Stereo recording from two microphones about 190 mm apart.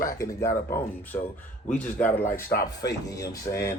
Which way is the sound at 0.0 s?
15° left (ahead or behind).